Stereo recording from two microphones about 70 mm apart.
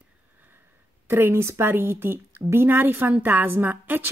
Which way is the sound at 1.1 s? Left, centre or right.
Right.